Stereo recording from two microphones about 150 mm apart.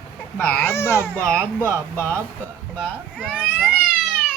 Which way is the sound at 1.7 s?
20° right (ahead or behind).